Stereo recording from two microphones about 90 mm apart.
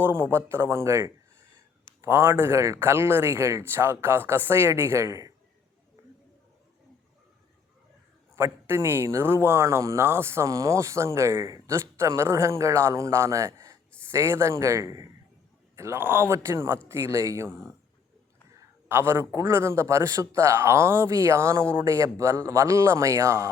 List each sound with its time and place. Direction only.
0.0 s speech: 25° right (ahead or behind)
8.4 s speech: 25° right (ahead or behind)
18.9 s speech: 25° right (ahead or behind)